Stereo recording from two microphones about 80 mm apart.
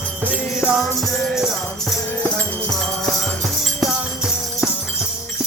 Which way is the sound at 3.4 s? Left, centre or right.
Centre.